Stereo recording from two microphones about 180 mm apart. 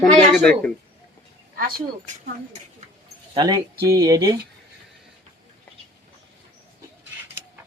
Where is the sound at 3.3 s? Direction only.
25° right (ahead or behind).